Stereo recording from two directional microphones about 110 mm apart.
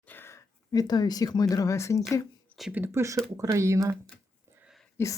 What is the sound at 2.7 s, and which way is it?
Speech, 20° right (ahead or behind).